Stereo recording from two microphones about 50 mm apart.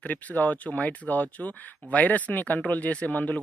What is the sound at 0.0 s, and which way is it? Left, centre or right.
Speech, left.